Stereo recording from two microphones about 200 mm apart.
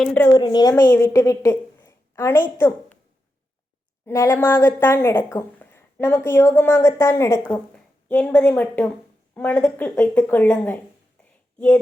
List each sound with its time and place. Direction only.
0.0 s speech: 5° left (ahead or behind)
0.3 s a woman's voice: 20° left (ahead or behind)
4.0 s a woman's voice: 15° left (ahead or behind)